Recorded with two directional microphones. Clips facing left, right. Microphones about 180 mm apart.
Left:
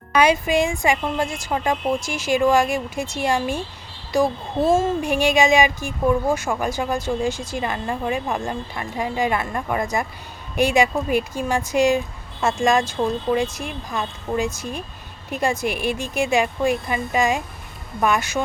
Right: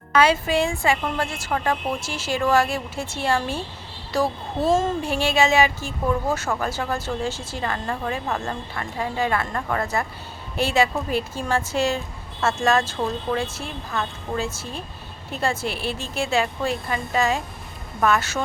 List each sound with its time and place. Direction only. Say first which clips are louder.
0.1 s speech: left 1 dB; 15° left (ahead or behind)